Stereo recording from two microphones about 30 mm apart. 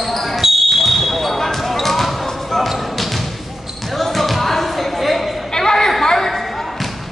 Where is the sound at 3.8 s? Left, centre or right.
Centre.